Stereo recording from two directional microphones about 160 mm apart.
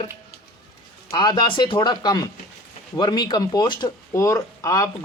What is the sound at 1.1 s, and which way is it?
Speech, 30° left (ahead or behind).